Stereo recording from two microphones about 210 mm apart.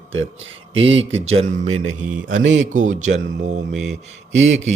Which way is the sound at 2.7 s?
35° right (ahead or behind).